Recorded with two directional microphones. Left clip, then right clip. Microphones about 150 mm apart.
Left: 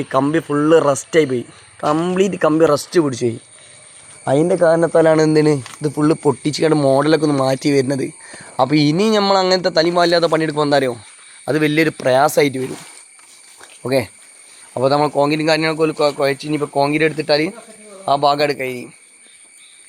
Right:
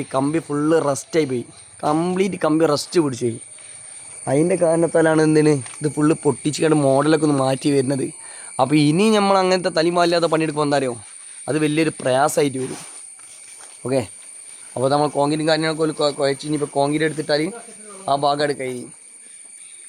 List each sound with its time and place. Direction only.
0.1 s speech: 5° left (ahead or behind)
13.8 s speech: centre (ahead or behind)